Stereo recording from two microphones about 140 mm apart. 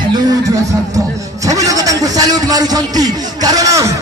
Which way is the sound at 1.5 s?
25° right (ahead or behind).